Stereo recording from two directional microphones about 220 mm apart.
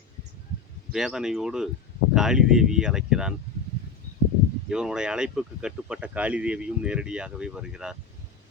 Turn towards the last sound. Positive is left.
turn(degrees=-5)  # may be behind; listen again after turning